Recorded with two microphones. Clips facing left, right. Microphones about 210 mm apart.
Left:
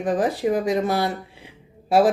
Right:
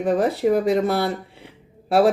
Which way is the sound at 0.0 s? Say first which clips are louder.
Right 2 dB; 60° right (ahead or behind).